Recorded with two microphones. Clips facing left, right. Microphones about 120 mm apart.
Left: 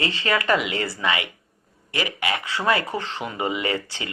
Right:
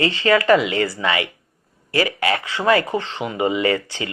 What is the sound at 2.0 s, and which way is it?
Speech, 35° right (ahead or behind).